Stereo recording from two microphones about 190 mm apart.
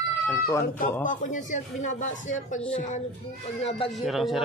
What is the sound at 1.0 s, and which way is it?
A man's voice, 45° left (ahead or behind).